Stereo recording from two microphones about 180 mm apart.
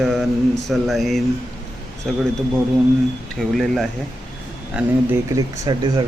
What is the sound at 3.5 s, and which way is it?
Speech, centre (ahead or behind).